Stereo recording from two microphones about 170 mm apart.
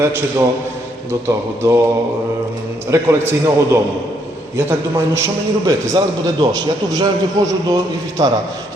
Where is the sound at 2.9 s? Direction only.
15° right (ahead or behind).